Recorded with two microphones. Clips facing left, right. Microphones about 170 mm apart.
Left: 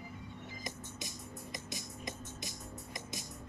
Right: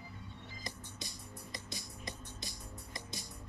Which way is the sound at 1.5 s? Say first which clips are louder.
Left 1 dB; 20° left (ahead or behind).